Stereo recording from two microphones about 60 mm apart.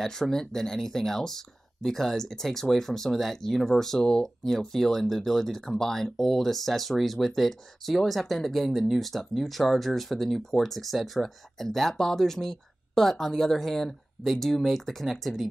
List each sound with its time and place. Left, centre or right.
0.0 s speech: centre